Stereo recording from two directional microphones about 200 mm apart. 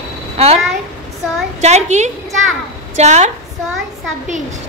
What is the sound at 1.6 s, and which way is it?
A woman's voice, 35° right (ahead or behind).